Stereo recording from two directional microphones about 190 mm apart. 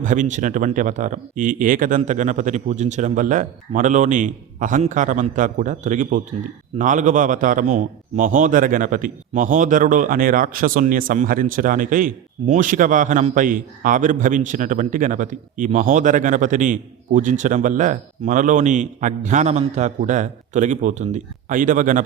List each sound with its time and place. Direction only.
0.0 s a man's voice: 40° right (ahead or behind)